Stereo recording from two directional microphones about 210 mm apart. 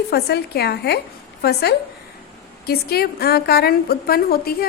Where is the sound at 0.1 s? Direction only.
50° left (ahead or behind).